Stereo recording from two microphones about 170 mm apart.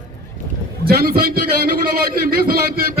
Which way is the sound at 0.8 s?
60° right (ahead or behind).